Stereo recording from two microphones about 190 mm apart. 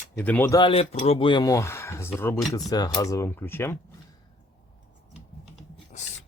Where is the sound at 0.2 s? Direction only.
10° left (ahead or behind).